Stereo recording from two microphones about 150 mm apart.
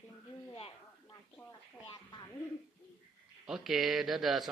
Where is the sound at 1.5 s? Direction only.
30° left (ahead or behind).